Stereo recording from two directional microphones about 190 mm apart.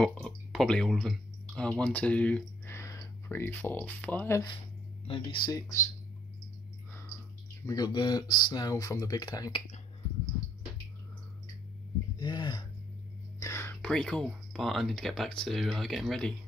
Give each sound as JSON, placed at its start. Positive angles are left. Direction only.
{"t": 0.0, "sound": "speech", "side_deg": 5}
{"t": 5.0, "sound": "speech", "side_deg": 30}
{"t": 5.5, "sound": "speech", "side_deg": 15}
{"t": 7.6, "sound": "speech", "side_deg": 20}
{"t": 12.2, "sound": "a sound", "side_deg": 25}
{"t": 13.4, "sound": "speech", "side_deg": 15}